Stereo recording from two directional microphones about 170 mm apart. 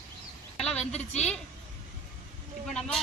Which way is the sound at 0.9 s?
40° left (ahead or behind).